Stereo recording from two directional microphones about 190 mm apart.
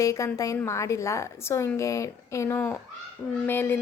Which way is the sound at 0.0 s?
15° left (ahead or behind).